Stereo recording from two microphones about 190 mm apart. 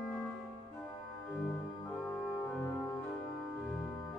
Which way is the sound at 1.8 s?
10° left (ahead or behind).